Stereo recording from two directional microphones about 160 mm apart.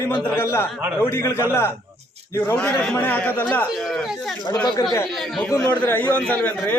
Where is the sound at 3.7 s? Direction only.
Centre (ahead or behind).